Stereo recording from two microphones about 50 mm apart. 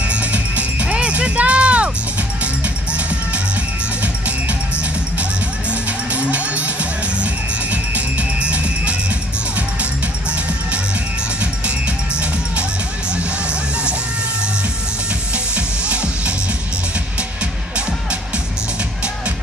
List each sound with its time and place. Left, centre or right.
0.1 s music: right
5.7 s music: right
13.1 s music: centre
15.3 s music: right